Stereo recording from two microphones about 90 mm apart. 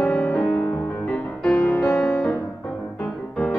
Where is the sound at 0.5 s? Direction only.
25° left (ahead or behind).